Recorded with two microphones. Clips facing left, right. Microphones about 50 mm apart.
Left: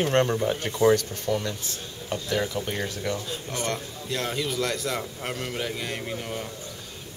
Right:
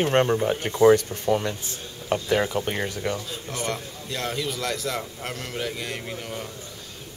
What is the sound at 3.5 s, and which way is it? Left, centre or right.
A man's voice, centre.